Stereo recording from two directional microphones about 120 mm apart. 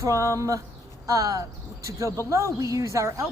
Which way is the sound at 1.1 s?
30° right (ahead or behind).